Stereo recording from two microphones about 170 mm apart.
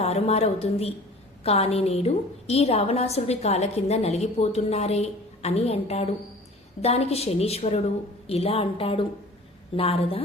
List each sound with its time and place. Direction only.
0.0 s a woman's voice: 40° left (ahead or behind)